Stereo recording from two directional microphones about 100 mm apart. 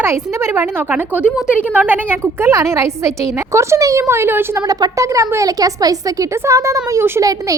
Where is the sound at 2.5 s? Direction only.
30° right (ahead or behind).